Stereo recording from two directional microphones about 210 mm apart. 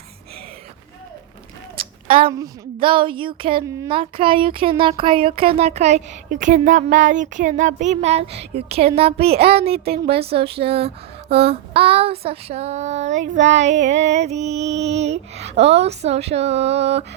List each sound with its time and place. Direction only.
1.7 s speech: 25° right (ahead or behind)
9.7 s speech: 50° right (ahead or behind)
10.1 s speech: 25° right (ahead or behind)